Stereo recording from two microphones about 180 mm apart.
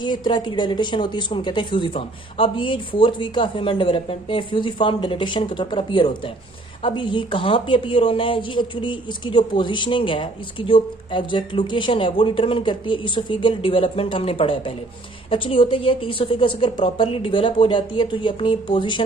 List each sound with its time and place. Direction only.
0.0 s a woman's voice: 25° left (ahead or behind)